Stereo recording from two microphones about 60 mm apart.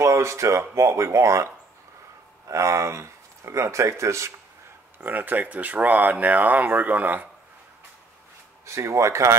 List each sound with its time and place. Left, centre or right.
0.0 s speech: right
5.0 s speech: right
8.6 s speech: right